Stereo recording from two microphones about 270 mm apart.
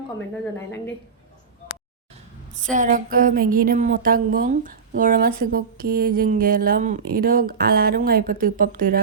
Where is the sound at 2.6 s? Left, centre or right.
Right.